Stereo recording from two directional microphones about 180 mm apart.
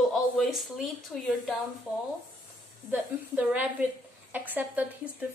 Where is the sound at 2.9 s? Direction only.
10° right (ahead or behind).